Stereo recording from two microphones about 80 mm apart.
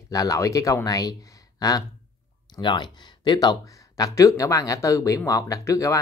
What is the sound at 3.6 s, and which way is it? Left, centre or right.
Speech, left.